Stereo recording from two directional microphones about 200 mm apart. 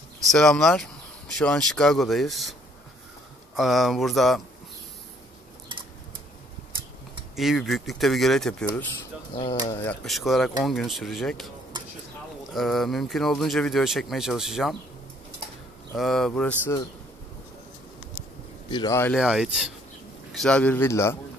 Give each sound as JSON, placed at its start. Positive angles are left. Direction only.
{"t": 0.3, "sound": "speech", "side_deg": 0}
{"t": 3.5, "sound": "speech", "side_deg": 0}
{"t": 7.3, "sound": "speech", "side_deg": 0}
{"t": 9.3, "sound": "speech", "side_deg": 30}
{"t": 9.8, "sound": "speech", "side_deg": 5}
{"t": 12.5, "sound": "speech", "side_deg": 0}
{"t": 16.0, "sound": "speech", "side_deg": 0}
{"t": 18.7, "sound": "a man's voice", "side_deg": 20}
{"t": 19.1, "sound": "a man's voice", "side_deg": -5}